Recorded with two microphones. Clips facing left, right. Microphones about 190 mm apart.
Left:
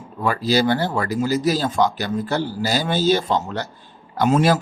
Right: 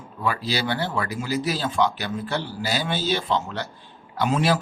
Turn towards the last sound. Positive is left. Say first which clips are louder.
# left 5 dB
turn(degrees=45)  # may be behind; listen again after turning